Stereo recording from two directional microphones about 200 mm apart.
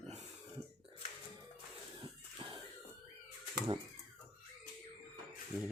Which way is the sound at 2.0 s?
25° right (ahead or behind).